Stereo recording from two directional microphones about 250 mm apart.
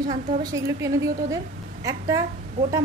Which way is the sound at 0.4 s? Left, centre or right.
Centre.